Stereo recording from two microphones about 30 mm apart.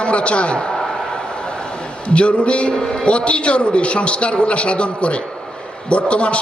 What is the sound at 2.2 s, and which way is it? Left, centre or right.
A man's voice, left.